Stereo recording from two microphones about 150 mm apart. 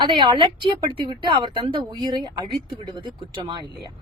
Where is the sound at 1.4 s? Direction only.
35° right (ahead or behind).